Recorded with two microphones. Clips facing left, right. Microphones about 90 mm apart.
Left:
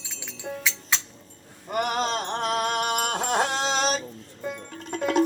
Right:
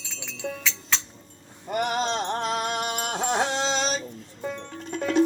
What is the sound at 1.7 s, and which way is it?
Music, 45° left (ahead or behind).